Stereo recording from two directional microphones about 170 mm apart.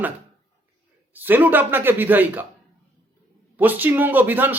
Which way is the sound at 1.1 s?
10° right (ahead or behind).